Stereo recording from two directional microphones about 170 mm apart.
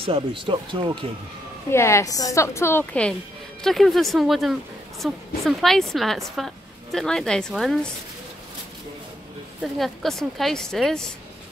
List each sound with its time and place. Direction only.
0.0 s speech: 30° right (ahead or behind)
1.7 s a woman's voice: 15° left (ahead or behind); by 7.9 s centre (ahead or behind)
9.6 s a woman's voice: centre (ahead or behind)